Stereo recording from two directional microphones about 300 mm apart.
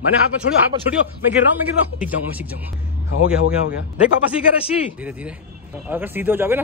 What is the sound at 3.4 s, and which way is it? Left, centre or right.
Speech, left.